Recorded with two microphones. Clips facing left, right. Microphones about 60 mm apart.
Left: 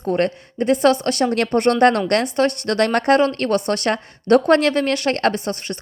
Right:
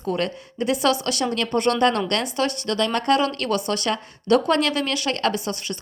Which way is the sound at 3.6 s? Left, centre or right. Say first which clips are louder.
Left 4 dB; left.